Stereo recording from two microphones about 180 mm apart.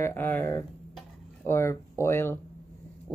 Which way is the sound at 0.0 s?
10° left (ahead or behind).